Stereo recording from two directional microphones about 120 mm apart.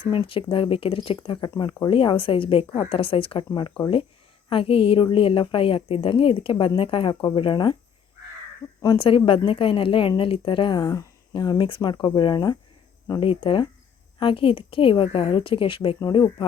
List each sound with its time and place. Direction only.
0.0 s speech: 45° left (ahead or behind)
9.0 s speech: 45° left (ahead or behind)
13.2 s speech: 50° left (ahead or behind)
16.0 s speech: 35° left (ahead or behind)